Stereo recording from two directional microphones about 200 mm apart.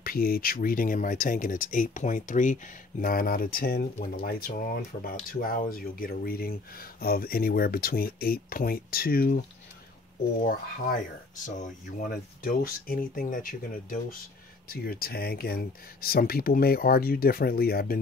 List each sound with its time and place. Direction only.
0.0 s speech: 50° left (ahead or behind)
11.4 s speech: 45° left (ahead or behind)